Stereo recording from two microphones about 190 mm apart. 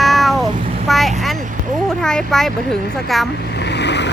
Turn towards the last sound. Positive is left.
turn(degrees=65)  # may be behind; listen again after turning